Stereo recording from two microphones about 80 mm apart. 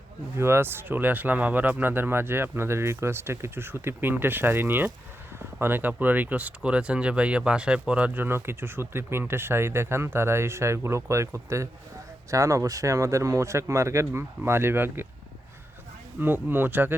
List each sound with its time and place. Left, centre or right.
0.3 s speech: right
16.2 s speech: right